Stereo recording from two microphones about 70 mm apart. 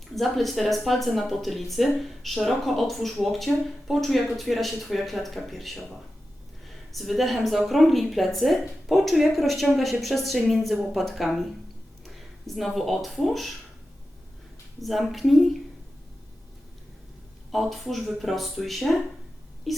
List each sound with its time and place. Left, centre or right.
0.2 s speech: centre
6.9 s speech: centre
14.8 s speech: centre
17.5 s speech: centre
19.7 s wail: centre